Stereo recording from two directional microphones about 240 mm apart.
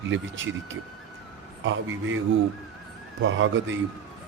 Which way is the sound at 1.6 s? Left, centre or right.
Right.